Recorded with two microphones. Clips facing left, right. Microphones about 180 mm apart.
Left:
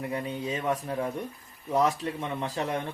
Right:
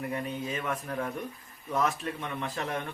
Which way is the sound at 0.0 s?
25° left (ahead or behind).